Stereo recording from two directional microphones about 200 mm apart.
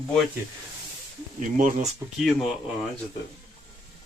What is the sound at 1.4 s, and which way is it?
Speech, 40° right (ahead or behind).